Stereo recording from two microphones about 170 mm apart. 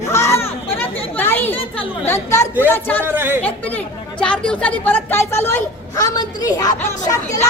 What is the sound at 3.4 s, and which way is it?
A man's voice, 10° left (ahead or behind).